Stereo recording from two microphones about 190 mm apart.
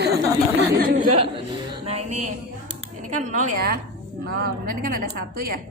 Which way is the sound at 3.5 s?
55° right (ahead or behind).